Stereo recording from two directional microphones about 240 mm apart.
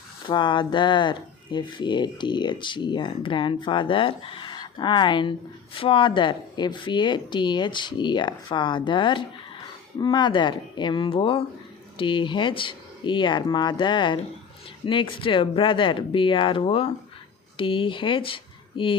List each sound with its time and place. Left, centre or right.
0.3 s speech: centre